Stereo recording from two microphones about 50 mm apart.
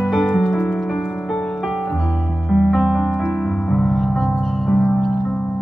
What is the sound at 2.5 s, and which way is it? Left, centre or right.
Music, centre.